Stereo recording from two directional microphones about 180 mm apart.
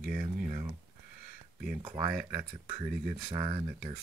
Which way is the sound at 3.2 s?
25° right (ahead or behind).